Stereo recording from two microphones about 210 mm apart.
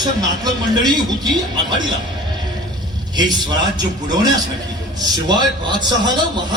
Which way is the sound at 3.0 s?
20° right (ahead or behind).